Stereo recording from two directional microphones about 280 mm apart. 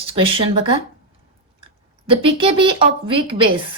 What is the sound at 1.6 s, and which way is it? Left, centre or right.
Speech, centre.